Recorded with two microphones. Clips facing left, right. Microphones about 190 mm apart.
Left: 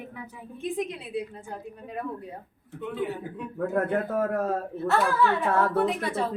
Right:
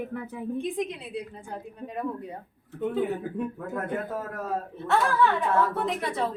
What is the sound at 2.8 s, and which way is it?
Speech, 45° right (ahead or behind).